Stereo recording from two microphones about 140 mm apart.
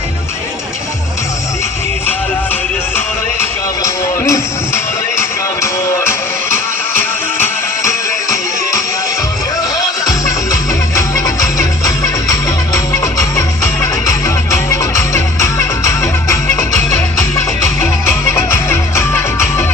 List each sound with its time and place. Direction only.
3.8 s music: 20° left (ahead or behind)
7.4 s music: 20° left (ahead or behind)